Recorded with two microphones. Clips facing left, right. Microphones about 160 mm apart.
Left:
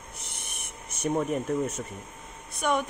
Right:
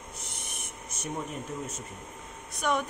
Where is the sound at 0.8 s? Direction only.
60° left (ahead or behind).